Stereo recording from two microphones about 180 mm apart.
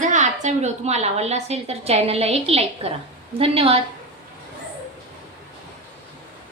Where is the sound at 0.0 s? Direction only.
40° right (ahead or behind).